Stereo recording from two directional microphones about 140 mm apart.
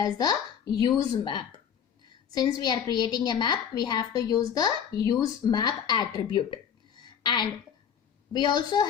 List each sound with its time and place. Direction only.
0.0 s a woman's voice: 30° left (ahead or behind)